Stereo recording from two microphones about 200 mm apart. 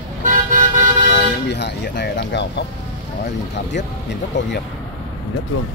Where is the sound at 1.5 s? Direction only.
55° left (ahead or behind).